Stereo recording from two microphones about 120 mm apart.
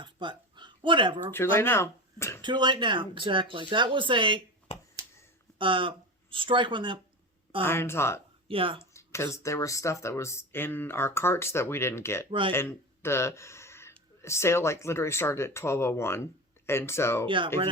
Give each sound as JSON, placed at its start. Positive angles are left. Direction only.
{"t": 0.0, "sound": "a sound", "side_deg": -40}
{"t": 1.3, "sound": "speech", "side_deg": 20}
{"t": 2.4, "sound": "speech", "side_deg": -40}
{"t": 5.5, "sound": "speech", "side_deg": -45}
{"t": 7.6, "sound": "speech", "side_deg": 20}
{"t": 8.4, "sound": "speech", "side_deg": -50}
{"t": 8.8, "sound": "speech", "side_deg": 25}
{"t": 12.3, "sound": "speech", "side_deg": -45}
{"t": 12.5, "sound": "a sound", "side_deg": 20}
{"t": 14.2, "sound": "speech", "side_deg": 25}
{"t": 17.2, "sound": "speech", "side_deg": -45}